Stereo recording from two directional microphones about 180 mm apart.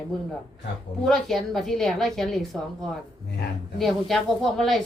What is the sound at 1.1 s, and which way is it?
A woman's voice, centre (ahead or behind).